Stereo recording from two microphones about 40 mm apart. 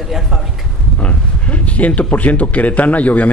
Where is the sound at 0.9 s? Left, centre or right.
Left.